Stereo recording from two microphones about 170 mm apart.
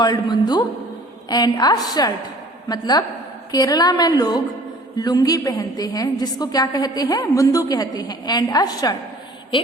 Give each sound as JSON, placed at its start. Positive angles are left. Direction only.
{"t": 0.0, "sound": "a woman's voice", "side_deg": 25}